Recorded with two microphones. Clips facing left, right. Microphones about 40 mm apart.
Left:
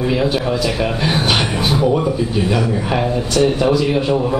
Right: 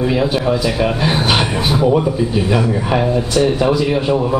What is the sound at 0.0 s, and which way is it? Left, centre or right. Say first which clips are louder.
Speech: right 1 dB; centre.